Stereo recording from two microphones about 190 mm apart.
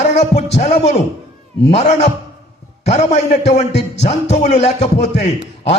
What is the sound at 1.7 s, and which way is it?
A man's voice, 35° left (ahead or behind).